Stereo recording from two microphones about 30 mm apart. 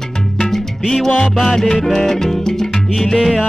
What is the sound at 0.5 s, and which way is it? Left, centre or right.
Salsa music, centre.